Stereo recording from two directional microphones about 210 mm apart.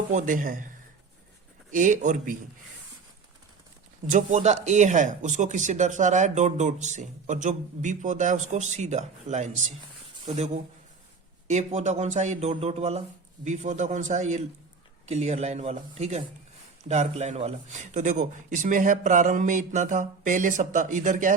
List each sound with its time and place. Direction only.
0.1 s speech: 35° right (ahead or behind)
1.7 s speech: 40° right (ahead or behind)
4.0 s speech: 35° right (ahead or behind)